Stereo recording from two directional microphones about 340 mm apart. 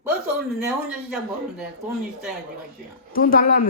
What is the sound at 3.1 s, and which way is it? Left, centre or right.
Speech, left.